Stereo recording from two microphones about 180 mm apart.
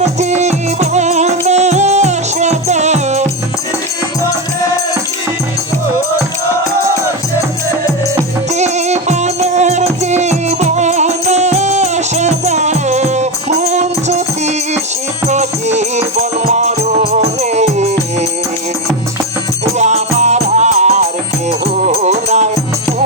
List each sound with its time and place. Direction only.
0.0 s music: 40° right (ahead or behind)
8.5 s music: 40° right (ahead or behind)
19.8 s music: 40° right (ahead or behind)